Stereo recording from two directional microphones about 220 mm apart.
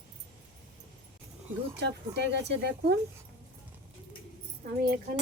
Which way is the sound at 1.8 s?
50° right (ahead or behind).